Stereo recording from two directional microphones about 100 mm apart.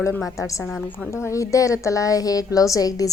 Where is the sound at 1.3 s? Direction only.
35° left (ahead or behind).